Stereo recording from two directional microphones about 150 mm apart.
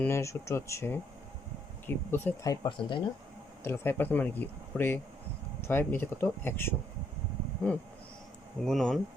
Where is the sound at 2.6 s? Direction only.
35° left (ahead or behind).